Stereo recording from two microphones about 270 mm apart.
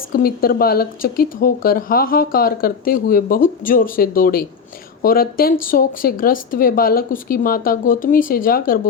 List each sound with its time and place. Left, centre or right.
0.1 s speech: left